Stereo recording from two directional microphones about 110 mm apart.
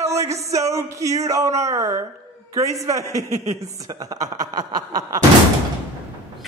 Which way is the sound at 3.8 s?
35° right (ahead or behind).